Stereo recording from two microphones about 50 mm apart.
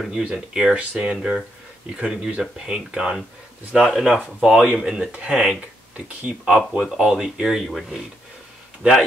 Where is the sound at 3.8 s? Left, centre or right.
Centre.